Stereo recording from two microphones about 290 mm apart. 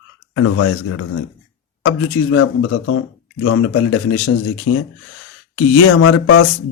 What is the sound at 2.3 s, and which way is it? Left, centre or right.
Speech, left.